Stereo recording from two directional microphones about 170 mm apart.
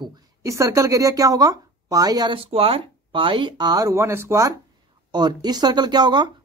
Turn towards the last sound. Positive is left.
turn(degrees=-25)  # may be behind; listen again after turning